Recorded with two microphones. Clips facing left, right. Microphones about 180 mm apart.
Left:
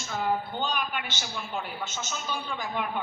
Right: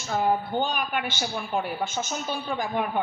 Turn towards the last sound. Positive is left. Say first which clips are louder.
# right 5 dB
turn(degrees=-45)  # may be behind; listen again after turning